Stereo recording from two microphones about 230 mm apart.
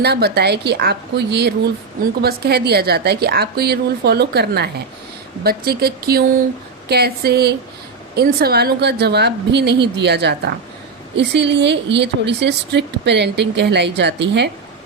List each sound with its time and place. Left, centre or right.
0.0 s a woman's voice: right